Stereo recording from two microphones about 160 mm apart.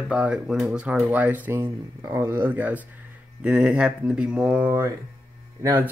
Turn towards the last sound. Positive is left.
turn(degrees=-10)  # may be behind; listen again after turning